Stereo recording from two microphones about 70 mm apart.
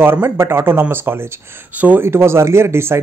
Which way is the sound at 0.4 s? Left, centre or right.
Right.